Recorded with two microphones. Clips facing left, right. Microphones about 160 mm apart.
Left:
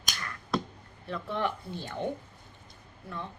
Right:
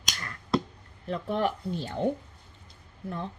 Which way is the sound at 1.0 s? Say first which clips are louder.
Right 4 dB; 35° right (ahead or behind).